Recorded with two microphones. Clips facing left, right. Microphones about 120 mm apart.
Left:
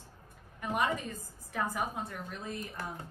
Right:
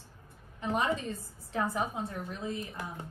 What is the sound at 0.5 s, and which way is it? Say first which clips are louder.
Speech: right 1 dB; 25° right (ahead or behind).